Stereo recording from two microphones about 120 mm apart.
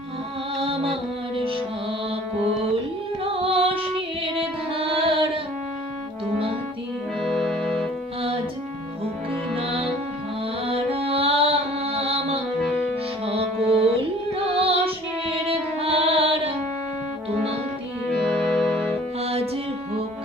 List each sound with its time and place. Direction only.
0.6 s music: 50° right (ahead or behind)
3.3 s music: 50° right (ahead or behind)
7.2 s music: centre (ahead or behind)
10.7 s music: 55° right (ahead or behind)
18.3 s music: centre (ahead or behind)
19.2 s music: 55° right (ahead or behind)